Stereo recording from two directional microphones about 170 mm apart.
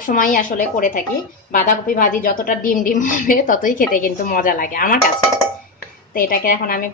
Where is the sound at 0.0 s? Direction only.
50° left (ahead or behind).